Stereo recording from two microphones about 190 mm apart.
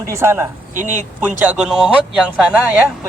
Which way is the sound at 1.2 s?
10° right (ahead or behind).